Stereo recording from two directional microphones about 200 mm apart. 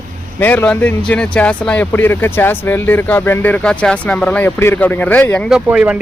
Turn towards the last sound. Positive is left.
turn(degrees=-5)  # may be behind; listen again after turning